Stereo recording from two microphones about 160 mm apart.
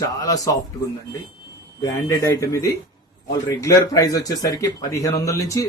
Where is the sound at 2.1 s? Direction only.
20° left (ahead or behind).